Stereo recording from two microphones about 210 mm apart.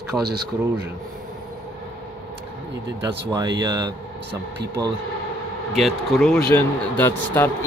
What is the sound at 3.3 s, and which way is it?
Speech, 20° right (ahead or behind).